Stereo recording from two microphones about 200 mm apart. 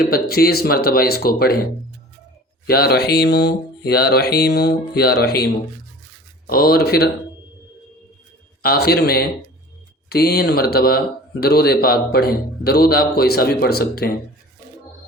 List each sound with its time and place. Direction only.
0.1 s speech: 50° left (ahead or behind)
2.6 s speech: 50° left (ahead or behind)
6.5 s speech: 50° left (ahead or behind)
8.6 s speech: 50° left (ahead or behind)